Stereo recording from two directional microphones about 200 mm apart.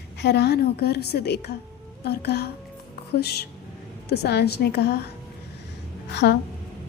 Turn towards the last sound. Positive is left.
turn(degrees=55)  # may be behind; listen again after turning